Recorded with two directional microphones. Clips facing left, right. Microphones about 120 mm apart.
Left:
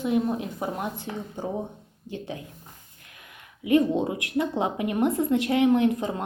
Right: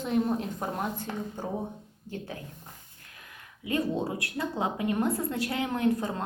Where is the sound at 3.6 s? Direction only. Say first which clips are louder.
Left 8 dB; 20° left (ahead or behind).